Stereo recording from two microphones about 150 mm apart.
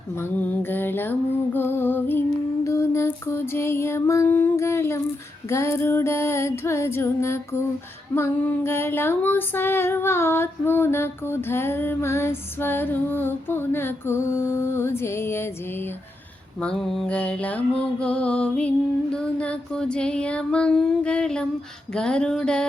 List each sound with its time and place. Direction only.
0.2 s female singing: 10° left (ahead or behind)
2.6 s music: 20° left (ahead or behind)
5.5 s female singing: 20° left (ahead or behind)
16.6 s female singing: 5° left (ahead or behind)
21.9 s a sound: 5° left (ahead or behind)